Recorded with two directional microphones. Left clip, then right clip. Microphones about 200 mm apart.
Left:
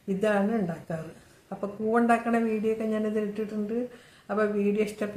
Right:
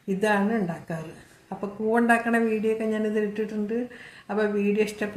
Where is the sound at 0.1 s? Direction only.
5° left (ahead or behind).